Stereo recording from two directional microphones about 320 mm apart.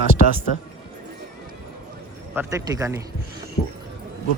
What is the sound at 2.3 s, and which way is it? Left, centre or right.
Speech, centre.